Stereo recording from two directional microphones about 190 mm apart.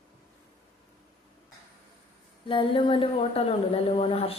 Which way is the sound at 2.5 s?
25° left (ahead or behind).